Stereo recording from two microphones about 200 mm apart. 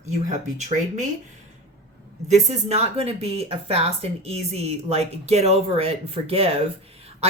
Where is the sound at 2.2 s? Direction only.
35° right (ahead or behind).